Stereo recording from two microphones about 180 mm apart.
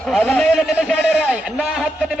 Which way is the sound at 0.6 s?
5° right (ahead or behind).